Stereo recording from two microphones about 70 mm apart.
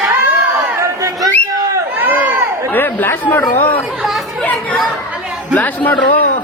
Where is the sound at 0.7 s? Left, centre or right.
Right.